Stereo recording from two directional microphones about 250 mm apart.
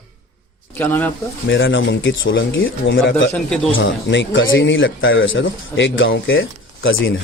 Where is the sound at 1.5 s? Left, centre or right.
Left.